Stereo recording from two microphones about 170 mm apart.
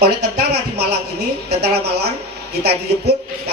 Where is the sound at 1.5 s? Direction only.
70° right (ahead or behind).